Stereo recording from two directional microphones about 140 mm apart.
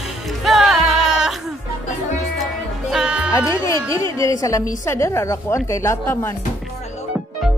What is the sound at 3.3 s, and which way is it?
A woman's voice, 20° left (ahead or behind).